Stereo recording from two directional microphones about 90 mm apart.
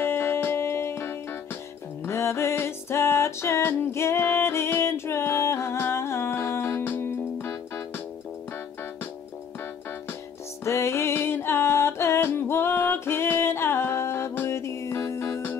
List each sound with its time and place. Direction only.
0.0 s music: 25° left (ahead or behind)
10.6 s music: 30° left (ahead or behind)